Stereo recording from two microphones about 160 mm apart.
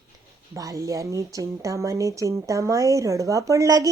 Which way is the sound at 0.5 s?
20° right (ahead or behind).